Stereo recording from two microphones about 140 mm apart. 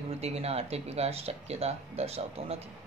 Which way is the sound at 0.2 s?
45° right (ahead or behind).